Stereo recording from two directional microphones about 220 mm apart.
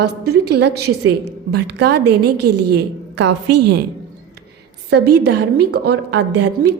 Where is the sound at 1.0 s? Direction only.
50° right (ahead or behind).